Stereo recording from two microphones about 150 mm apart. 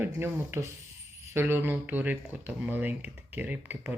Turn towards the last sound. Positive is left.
turn(degrees=-10)  # may be behind; listen again after turning